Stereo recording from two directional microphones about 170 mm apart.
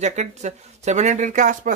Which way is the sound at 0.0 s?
40° right (ahead or behind).